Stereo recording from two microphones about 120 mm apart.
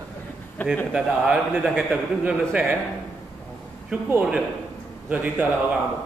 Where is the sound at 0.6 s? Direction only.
15° left (ahead or behind).